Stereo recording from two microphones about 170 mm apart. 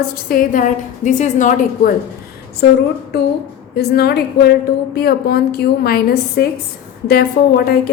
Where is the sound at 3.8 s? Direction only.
70° left (ahead or behind).